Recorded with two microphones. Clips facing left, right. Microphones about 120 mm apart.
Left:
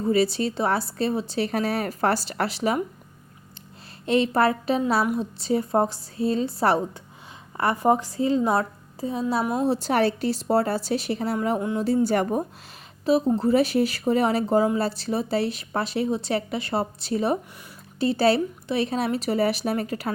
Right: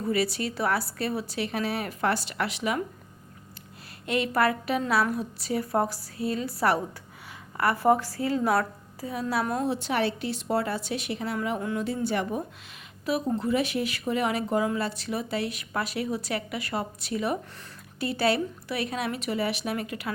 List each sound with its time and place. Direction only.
0.0 s a woman's voice: 30° left (ahead or behind)
1.5 s speech: 40° left (ahead or behind)
4.0 s a woman's voice: 30° left (ahead or behind)
9.4 s a woman's voice: 5° left (ahead or behind)
9.6 s speech: 40° left (ahead or behind)
13.1 s speech: 30° left (ahead or behind)